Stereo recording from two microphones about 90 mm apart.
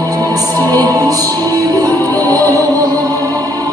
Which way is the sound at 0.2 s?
45° right (ahead or behind).